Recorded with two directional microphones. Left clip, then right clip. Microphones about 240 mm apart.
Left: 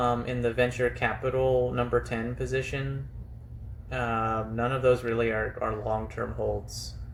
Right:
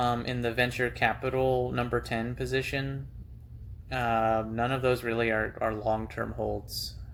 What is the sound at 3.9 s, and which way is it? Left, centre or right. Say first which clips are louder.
Speech: right 2 dB; right.